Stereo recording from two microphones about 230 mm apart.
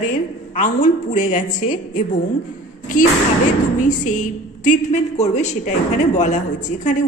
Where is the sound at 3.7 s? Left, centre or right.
Left.